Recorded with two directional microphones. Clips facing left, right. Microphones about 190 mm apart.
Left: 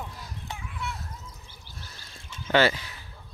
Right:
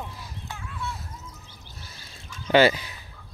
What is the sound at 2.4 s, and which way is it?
Speech, 15° right (ahead or behind).